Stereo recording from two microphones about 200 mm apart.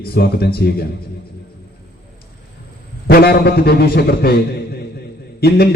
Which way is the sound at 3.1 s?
50° left (ahead or behind).